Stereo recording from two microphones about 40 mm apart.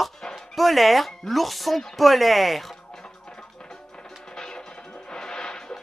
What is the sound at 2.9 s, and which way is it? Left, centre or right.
Music, centre.